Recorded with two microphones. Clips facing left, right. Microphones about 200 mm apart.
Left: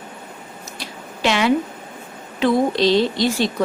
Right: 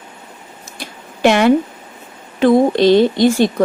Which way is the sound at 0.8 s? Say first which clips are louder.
Right 8 dB; 55° right (ahead or behind).